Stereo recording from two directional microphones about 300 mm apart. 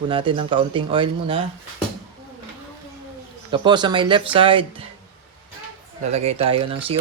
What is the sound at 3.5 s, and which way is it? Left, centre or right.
Speech, centre.